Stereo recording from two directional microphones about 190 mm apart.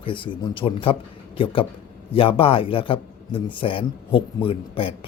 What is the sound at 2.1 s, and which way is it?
A man's voice, 30° left (ahead or behind).